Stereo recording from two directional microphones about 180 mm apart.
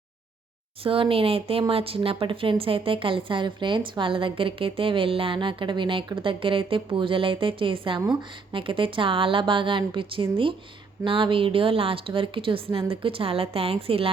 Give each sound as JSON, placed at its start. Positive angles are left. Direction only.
{"t": 0.9, "sound": "a woman's voice", "side_deg": -30}